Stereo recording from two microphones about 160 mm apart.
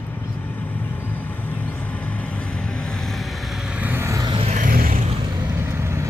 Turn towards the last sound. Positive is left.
turn(degrees=-15)  # may be behind; listen again after turning